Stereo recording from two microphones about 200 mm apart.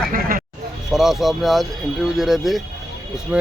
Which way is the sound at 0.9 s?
Centre (ahead or behind).